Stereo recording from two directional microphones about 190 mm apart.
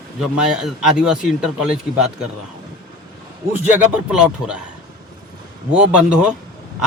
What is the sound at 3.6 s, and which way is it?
Speech, 10° right (ahead or behind).